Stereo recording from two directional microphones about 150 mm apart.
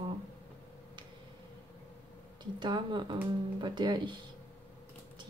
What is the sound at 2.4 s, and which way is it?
Speech, 30° right (ahead or behind).